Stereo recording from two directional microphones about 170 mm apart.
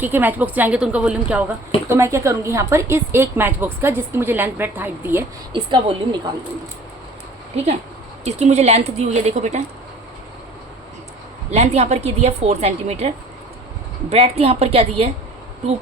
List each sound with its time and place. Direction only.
0.0 s a woman's voice: 10° right (ahead or behind)
5.5 s a woman's voice: 25° right (ahead or behind)
7.5 s a woman's voice: 40° right (ahead or behind)
11.5 s a woman's voice: 40° right (ahead or behind)
14.1 s a woman's voice: 35° right (ahead or behind)